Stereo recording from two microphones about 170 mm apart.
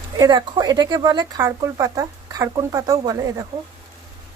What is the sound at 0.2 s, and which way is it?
Speech, 25° right (ahead or behind).